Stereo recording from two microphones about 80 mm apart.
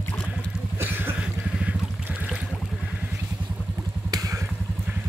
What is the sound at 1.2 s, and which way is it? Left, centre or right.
Boat, centre.